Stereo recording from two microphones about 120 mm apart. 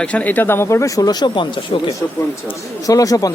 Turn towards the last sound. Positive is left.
turn(degrees=30)  # may be behind; listen again after turning